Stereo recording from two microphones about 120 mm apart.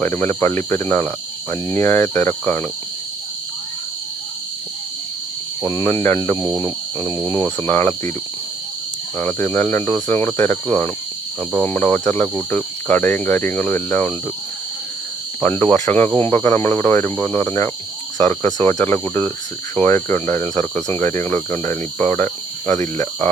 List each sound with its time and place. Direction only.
0.0 s cricket: 15° left (ahead or behind)
5.6 s cricket: 25° left (ahead or behind)
9.1 s speech: 15° left (ahead or behind)
15.4 s speech: 15° left (ahead or behind)
18.9 s speech: 15° left (ahead or behind)
19.7 s cricket: 20° left (ahead or behind)